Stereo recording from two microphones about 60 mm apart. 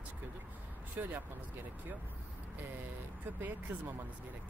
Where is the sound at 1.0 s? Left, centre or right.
Right.